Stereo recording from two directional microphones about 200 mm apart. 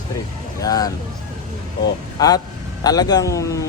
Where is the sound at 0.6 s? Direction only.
20° left (ahead or behind).